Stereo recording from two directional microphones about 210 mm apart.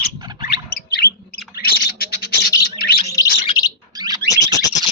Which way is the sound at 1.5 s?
45° left (ahead or behind).